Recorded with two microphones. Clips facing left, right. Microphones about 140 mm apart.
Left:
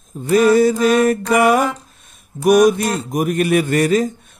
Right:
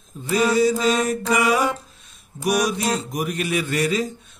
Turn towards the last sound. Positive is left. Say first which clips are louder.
# left 7 dB
turn(degrees=50)  # may be behind; listen again after turning